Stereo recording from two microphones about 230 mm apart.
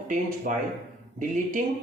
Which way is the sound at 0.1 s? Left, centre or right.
Right.